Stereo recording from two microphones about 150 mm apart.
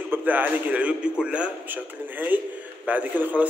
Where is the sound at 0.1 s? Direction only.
10° right (ahead or behind).